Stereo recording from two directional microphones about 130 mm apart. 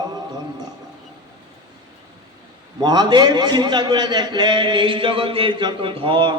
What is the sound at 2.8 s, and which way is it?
A man's voice, 30° right (ahead or behind).